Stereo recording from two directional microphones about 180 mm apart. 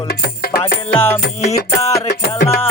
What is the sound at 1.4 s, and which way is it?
Music, 35° left (ahead or behind).